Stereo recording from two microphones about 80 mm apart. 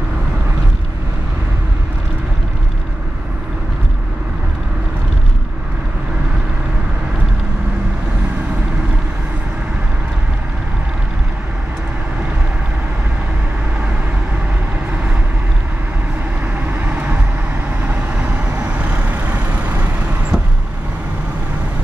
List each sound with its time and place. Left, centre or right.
16.8 s vehicle: right